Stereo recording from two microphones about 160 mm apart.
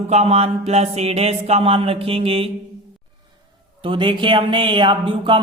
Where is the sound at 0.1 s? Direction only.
40° right (ahead or behind).